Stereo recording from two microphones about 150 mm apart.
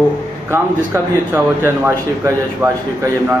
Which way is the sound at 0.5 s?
15° right (ahead or behind).